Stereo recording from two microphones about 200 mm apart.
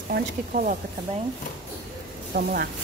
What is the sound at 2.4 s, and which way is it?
Speech, 50° right (ahead or behind).